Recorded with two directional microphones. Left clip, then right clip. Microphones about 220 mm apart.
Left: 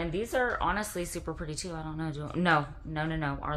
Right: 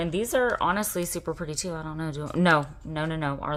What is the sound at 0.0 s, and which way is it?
A woman's voice, 40° right (ahead or behind).